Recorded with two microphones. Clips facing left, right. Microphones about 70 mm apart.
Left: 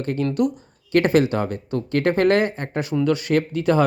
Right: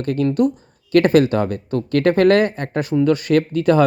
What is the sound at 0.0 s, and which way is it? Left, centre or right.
Speech, right.